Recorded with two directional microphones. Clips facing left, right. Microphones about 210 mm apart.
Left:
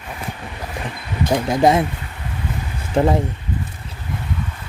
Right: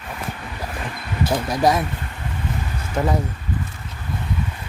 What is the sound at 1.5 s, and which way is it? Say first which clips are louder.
Speech: left 4 dB; 25° left (ahead or behind).